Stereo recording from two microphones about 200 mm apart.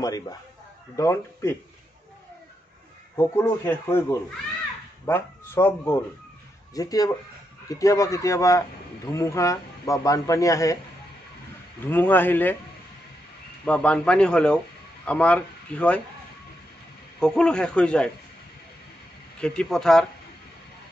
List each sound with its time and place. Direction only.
0.0 s a man's voice: 20° left (ahead or behind)
3.2 s a man's voice: 15° left (ahead or behind)
11.9 s a man's voice: 10° left (ahead or behind)
13.7 s speech: 5° left (ahead or behind)
17.2 s speech: 5° left (ahead or behind)
19.4 s speech: 5° left (ahead or behind)